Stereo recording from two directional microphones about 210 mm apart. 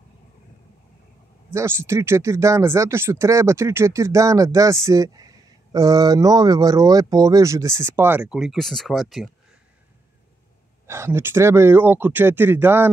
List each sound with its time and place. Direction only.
1.5 s speech: 10° right (ahead or behind)
10.9 s speech: 10° right (ahead or behind)